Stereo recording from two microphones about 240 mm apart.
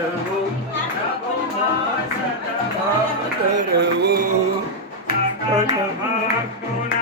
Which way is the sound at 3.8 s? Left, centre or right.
Right.